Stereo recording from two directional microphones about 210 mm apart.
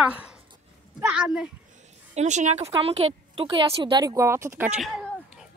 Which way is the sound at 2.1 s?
35° right (ahead or behind).